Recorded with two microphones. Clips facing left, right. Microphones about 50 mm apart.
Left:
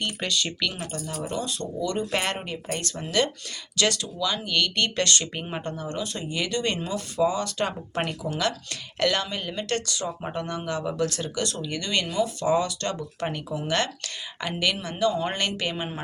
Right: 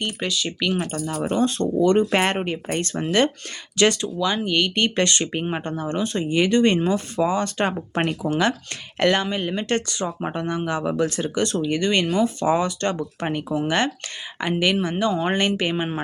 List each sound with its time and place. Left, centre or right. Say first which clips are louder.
0.0 s speech: right 2 dB; centre
0.6 s speech: right 7 dB; right
0.9 s speech: right 6 dB; right
1.3 s speech: right 12 dB; right